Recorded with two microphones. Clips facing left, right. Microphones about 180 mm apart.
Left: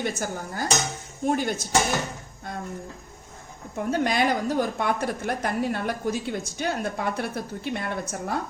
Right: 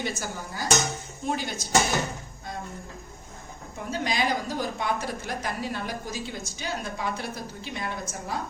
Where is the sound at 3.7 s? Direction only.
55° left (ahead or behind).